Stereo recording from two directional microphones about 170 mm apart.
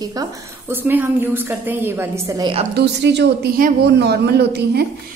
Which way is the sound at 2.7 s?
85° right.